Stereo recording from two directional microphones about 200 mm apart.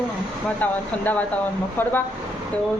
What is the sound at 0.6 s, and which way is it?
Speech, 10° left (ahead or behind).